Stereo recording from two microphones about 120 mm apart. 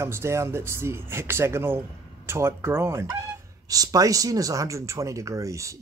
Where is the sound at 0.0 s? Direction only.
20° right (ahead or behind).